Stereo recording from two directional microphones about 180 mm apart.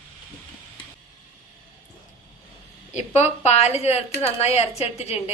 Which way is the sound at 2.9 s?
40° left (ahead or behind).